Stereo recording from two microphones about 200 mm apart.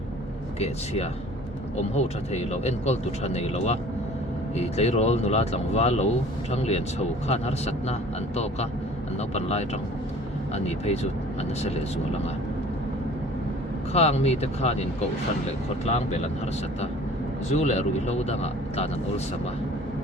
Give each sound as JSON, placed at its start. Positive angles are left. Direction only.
{"t": 1.7, "sound": "speech", "side_deg": 35}
{"t": 9.3, "sound": "speech", "side_deg": 35}
{"t": 13.9, "sound": "speech", "side_deg": 30}
{"t": 17.5, "sound": "speech", "side_deg": 35}